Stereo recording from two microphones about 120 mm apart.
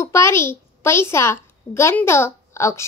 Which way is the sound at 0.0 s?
20° left (ahead or behind).